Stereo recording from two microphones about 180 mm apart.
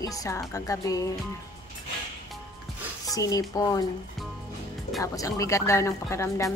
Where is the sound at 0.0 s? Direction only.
20° left (ahead or behind).